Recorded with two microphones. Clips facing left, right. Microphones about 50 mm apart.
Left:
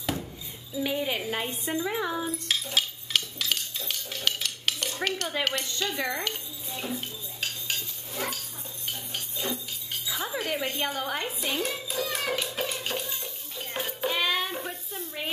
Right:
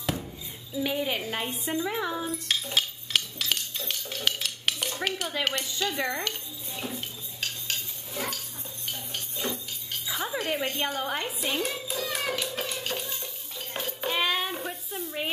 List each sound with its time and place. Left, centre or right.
0.0 s dishes: centre
0.7 s a woman's voice: centre
2.3 s dishes: centre
5.4 s a woman's voice: centre
6.1 s dishes: centre
8.8 s cutlery: centre
10.1 s music: centre
11.0 s hands: centre
14.1 s a sound: centre